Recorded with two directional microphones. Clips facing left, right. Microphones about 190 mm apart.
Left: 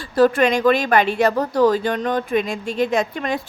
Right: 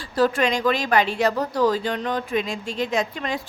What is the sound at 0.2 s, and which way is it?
A woman's voice, 55° left (ahead or behind).